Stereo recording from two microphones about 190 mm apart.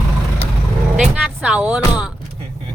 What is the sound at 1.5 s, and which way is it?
Speech, 5° right (ahead or behind).